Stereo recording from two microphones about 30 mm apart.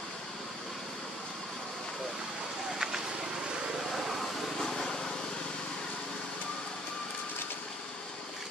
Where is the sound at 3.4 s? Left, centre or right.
Right.